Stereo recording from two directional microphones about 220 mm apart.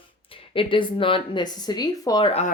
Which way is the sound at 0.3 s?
25° left (ahead or behind).